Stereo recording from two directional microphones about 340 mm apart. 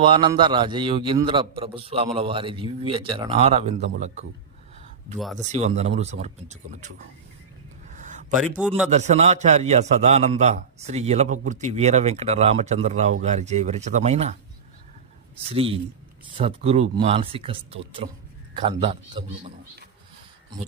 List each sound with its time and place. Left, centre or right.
0.0 s a man's voice: centre
5.1 s a man's voice: centre
5.4 s a man's voice: centre
8.4 s a man's voice: centre
8.9 s a man's voice: centre
15.4 s a man's voice: centre